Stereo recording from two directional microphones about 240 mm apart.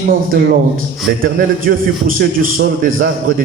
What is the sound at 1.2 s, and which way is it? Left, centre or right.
A man's voice, right.